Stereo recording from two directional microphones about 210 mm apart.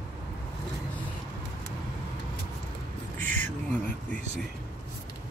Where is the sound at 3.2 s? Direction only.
10° left (ahead or behind).